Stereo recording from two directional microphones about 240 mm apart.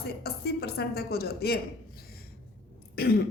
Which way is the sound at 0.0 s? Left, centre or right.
Left.